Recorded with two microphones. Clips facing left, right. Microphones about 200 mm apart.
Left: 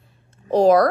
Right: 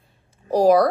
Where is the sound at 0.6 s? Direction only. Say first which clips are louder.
Left 1 dB; centre (ahead or behind).